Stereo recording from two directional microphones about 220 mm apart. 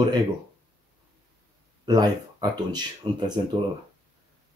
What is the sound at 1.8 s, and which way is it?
Speech, 15° right (ahead or behind).